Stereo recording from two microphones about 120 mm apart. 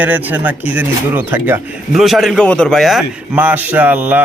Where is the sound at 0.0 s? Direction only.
15° right (ahead or behind).